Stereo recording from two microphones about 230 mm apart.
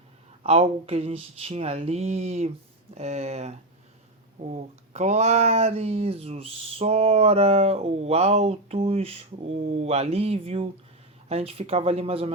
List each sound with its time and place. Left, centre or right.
0.4 s speech: right
4.5 s speech: right